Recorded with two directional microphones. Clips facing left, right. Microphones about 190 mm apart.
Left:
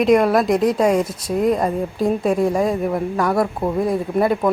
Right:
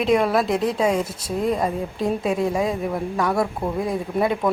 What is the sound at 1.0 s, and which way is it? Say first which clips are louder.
Speech: left 4 dB; 25° right (ahead or behind).